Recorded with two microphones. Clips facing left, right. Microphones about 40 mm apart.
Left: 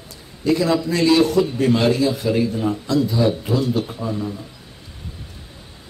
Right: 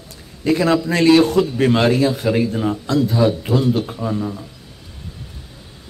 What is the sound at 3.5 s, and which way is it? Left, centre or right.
Speech, right.